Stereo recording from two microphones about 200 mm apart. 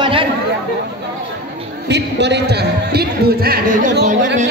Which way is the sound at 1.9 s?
60° right (ahead or behind).